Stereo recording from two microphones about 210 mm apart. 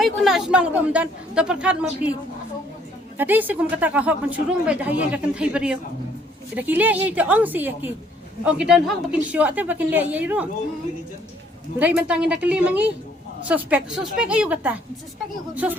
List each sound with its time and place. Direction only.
0.0 s speech: centre (ahead or behind)
3.2 s speech: 10° right (ahead or behind)
11.8 s speech: 5° right (ahead or behind)